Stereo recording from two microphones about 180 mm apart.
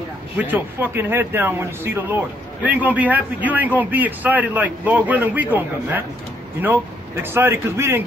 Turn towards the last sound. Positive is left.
turn(degrees=-15)  # may be behind; listen again after turning